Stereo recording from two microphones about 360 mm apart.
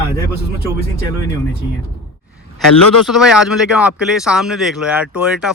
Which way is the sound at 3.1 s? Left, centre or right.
Centre.